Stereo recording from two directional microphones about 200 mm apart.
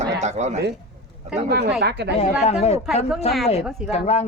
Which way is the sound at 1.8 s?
55° right (ahead or behind).